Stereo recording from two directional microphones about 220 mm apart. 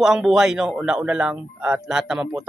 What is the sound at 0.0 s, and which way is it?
Speech, centre (ahead or behind).